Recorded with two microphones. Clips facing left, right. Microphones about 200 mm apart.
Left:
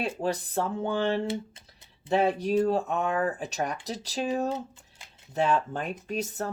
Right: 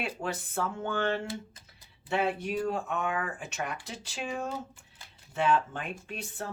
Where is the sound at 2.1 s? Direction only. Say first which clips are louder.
Left 6 dB; 35° left (ahead or behind).